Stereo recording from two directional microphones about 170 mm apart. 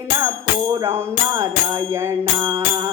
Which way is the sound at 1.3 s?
20° right (ahead or behind).